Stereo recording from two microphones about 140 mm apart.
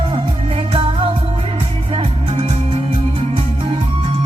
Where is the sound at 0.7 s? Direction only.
40° right (ahead or behind).